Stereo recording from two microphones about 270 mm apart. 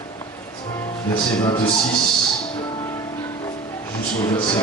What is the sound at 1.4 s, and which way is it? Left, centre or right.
Speech, centre.